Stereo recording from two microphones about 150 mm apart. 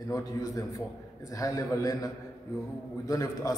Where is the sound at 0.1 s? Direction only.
25° left (ahead or behind).